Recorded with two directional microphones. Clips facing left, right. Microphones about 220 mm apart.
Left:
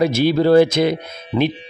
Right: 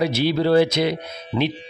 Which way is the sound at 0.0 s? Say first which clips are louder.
Left 4 dB; 50° left (ahead or behind).